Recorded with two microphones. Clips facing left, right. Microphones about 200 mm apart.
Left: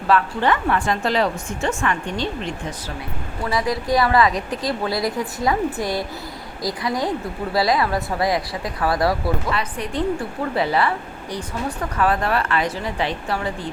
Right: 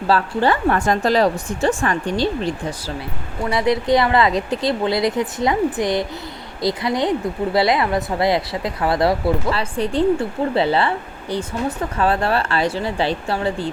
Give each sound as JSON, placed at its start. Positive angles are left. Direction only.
{"t": 0.1, "sound": "a woman's voice", "side_deg": -35}